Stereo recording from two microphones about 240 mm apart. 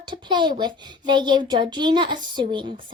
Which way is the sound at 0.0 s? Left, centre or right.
Centre.